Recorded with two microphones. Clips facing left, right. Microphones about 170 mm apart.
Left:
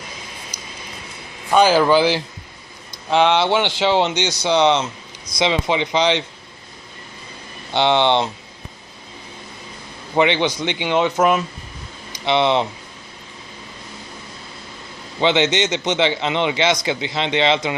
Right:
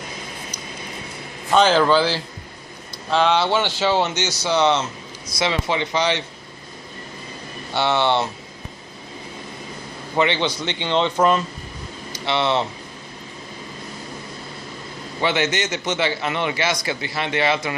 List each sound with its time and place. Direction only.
1.5 s speech: 10° left (ahead or behind)
7.7 s speech: 20° left (ahead or behind)
10.2 s speech: 15° left (ahead or behind)
15.2 s a man's voice: 20° left (ahead or behind)